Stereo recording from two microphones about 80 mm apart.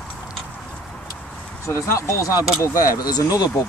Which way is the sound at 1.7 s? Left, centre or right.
Left.